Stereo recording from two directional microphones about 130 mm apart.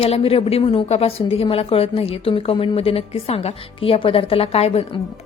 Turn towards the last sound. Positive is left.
turn(degrees=50)  # may be behind; listen again after turning